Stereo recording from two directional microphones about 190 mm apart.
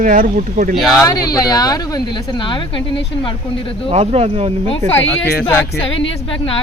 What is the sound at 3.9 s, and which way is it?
Speech, 35° right (ahead or behind).